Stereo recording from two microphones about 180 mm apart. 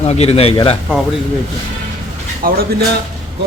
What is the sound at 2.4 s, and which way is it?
Speech, 55° right (ahead or behind).